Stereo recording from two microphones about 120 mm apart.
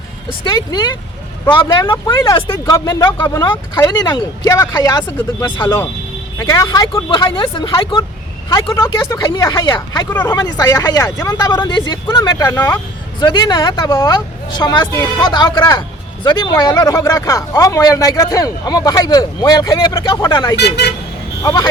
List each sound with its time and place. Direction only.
0.4 s speech: 35° left (ahead or behind)
2.2 s speech: 25° left (ahead or behind)
5.6 s speech: 20° left (ahead or behind)
6.7 s speech: 40° left (ahead or behind)
10.1 s speech: 20° left (ahead or behind)
10.3 s speech: 35° left (ahead or behind)